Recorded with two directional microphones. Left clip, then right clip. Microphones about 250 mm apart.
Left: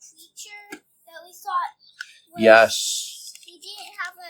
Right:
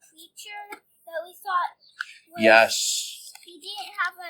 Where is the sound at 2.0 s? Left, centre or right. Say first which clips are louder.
Left 4 dB; left.